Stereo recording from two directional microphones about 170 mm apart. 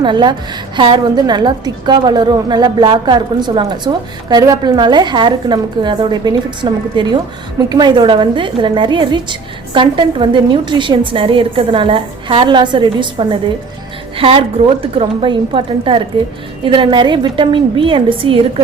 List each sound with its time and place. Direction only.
0.0 s a woman's voice: 25° right (ahead or behind)